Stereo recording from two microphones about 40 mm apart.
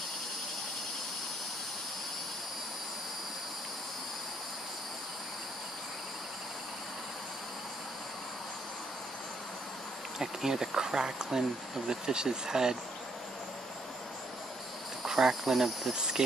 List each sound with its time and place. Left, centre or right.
10.1 s speech: centre
15.0 s speech: centre
15.9 s speech: centre